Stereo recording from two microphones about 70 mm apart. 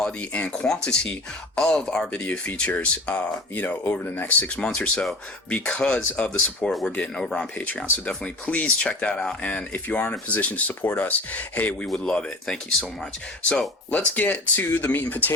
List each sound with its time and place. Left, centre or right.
0.0 s speech: centre
11.9 s speech: centre
14.1 s speech: left